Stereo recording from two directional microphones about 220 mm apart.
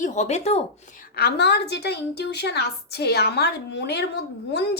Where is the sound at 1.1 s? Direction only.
45° left (ahead or behind).